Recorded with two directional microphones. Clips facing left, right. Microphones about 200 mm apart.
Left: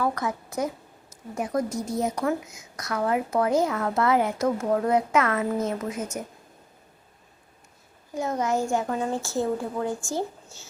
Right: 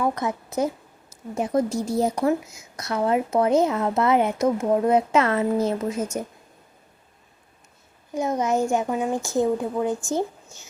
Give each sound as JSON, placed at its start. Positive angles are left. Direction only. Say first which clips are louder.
{"t": 0.0, "sound": "a woman's voice", "louder": "right 2 dB", "side_deg": -20}
{"t": 8.1, "sound": "a woman's voice", "louder": "right 3 dB", "side_deg": -20}